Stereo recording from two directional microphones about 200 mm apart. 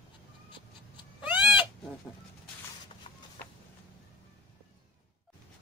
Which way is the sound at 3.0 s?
30° left (ahead or behind).